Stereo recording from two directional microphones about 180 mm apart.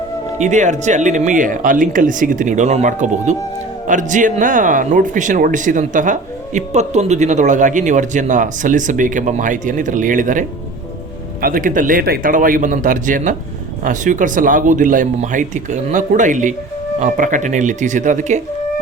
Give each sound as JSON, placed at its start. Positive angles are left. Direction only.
{"t": 0.3, "sound": "speech", "side_deg": -40}
{"t": 11.4, "sound": "speech", "side_deg": -50}